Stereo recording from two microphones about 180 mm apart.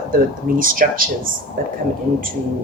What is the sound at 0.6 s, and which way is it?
Speech, 50° right (ahead or behind).